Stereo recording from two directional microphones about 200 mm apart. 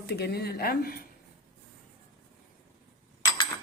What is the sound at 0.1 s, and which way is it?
Speech, 55° left (ahead or behind).